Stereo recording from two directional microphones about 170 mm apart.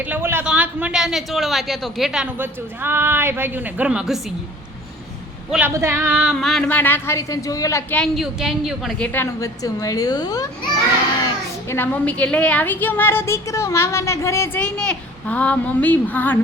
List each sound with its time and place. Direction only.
0.0 s a man's voice: 10° right (ahead or behind)
5.5 s a man's voice: 5° right (ahead or behind)
6.3 s a woman's voice: centre (ahead or behind)
9.1 s a woman's voice: 15° left (ahead or behind)
11.7 s a woman's voice: 10° left (ahead or behind)